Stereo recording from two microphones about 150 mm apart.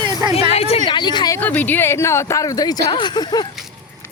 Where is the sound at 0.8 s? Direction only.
30° left (ahead or behind).